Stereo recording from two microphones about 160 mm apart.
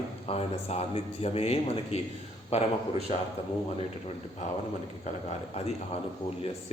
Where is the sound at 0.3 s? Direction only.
40° left (ahead or behind).